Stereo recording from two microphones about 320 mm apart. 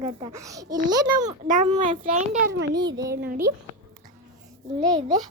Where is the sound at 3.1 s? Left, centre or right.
Right.